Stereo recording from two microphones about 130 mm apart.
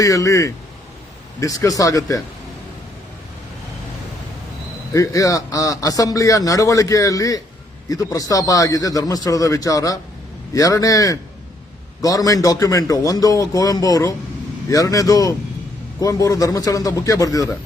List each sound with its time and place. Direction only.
0.0 s a man's voice: 25° left (ahead or behind)
4.9 s a man's voice: 25° left (ahead or behind)